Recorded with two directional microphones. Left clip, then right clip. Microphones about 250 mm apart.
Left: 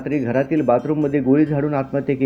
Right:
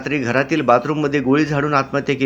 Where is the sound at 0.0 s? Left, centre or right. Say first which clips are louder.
Right 2 dB; centre.